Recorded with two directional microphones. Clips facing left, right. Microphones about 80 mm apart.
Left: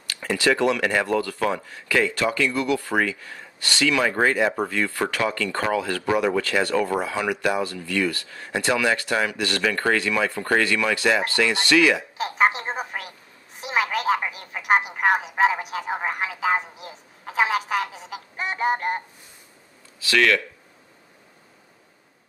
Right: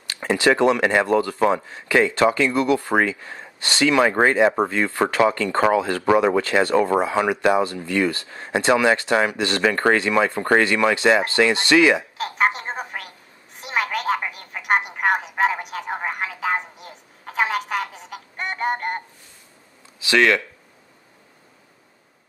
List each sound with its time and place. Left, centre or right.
0.0 s speech: right
12.2 s telephone: centre
13.6 s speech: centre
20.0 s speech: right